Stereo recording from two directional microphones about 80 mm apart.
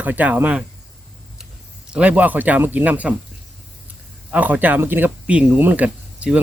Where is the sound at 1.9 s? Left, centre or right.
Centre.